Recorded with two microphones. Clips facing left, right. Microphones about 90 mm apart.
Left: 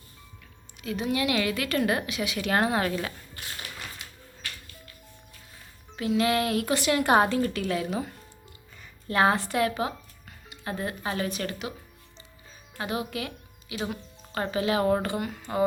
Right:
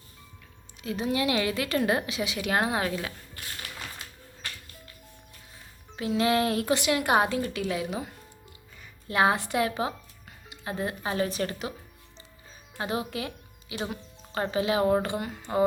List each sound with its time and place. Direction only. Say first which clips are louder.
0.8 s a woman's voice: even; 30° right (ahead or behind)
2.4 s a woman's voice: left 2 dB; 15° right (ahead or behind)
6.1 s a woman's voice: even; 25° right (ahead or behind)
6.8 s a woman's voice: left 4 dB; 5° right (ahead or behind); by 11.7 s 35° right (ahead or behind)
12.8 s a woman's voice: even; 30° right (ahead or behind)